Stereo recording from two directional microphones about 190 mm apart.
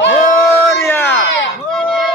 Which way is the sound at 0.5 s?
10° left (ahead or behind).